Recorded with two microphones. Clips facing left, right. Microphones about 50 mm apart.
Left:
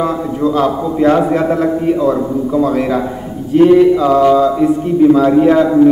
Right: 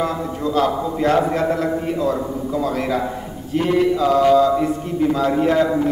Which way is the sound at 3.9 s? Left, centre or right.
Left.